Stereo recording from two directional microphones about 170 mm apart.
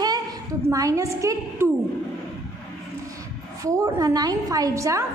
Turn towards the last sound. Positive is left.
turn(degrees=-20)  # may be behind; listen again after turning